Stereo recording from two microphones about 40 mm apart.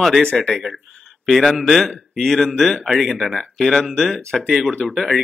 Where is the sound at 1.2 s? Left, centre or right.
Centre.